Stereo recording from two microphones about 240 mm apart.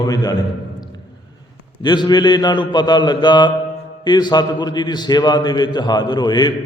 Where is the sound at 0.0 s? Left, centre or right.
Centre.